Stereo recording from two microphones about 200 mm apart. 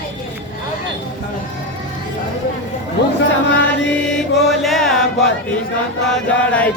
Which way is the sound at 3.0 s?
55° left (ahead or behind).